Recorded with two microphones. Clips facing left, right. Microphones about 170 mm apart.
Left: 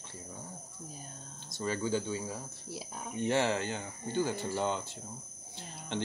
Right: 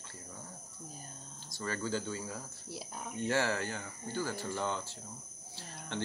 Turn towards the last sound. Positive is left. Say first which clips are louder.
# left 3 dB
turn(degrees=20)  # may be behind; listen again after turning